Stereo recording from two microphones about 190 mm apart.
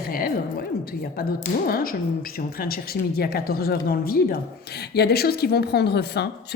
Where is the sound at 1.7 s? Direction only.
50° left (ahead or behind).